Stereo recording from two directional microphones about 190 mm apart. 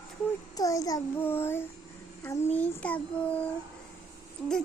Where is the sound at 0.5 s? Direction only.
20° left (ahead or behind).